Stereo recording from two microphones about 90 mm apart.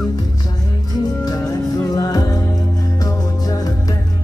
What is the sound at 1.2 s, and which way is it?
Music, 45° left (ahead or behind).